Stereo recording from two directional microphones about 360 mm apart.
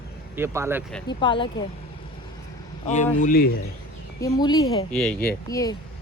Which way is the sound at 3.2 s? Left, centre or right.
Left.